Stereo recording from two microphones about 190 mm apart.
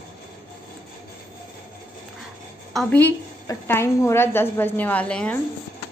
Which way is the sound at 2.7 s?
5° left (ahead or behind).